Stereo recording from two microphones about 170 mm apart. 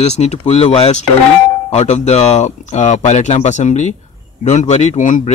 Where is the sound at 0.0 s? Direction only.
40° left (ahead or behind).